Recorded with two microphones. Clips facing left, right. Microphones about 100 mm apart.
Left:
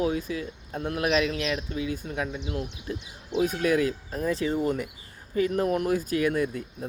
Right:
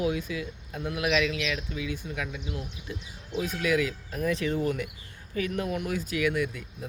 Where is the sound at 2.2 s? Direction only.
30° left (ahead or behind).